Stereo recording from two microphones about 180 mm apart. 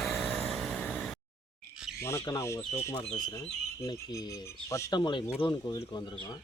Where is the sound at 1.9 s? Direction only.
15° left (ahead or behind).